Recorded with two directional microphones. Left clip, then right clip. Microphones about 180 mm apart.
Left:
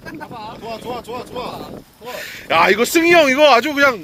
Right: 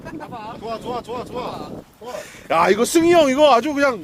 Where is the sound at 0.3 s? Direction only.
Centre (ahead or behind).